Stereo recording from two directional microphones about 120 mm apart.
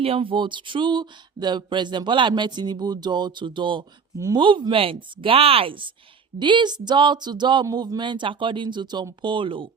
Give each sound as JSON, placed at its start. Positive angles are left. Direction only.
{"t": 0.0, "sound": "speech", "side_deg": -50}